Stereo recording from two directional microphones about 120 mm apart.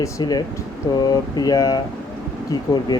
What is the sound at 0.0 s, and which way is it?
Speech, 35° left (ahead or behind).